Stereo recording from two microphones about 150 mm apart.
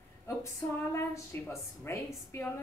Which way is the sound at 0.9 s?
20° left (ahead or behind).